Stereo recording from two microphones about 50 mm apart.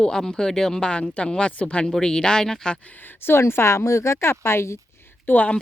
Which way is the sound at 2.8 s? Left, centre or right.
Left.